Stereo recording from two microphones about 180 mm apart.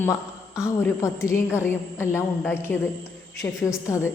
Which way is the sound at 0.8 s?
15° left (ahead or behind).